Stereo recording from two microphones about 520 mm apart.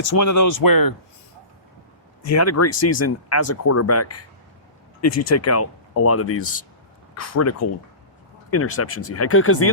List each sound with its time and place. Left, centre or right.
0.2 s speech: left
2.2 s speech: left